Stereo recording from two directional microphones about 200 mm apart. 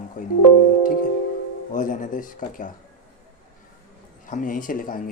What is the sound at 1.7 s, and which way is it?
Speech, 40° left (ahead or behind).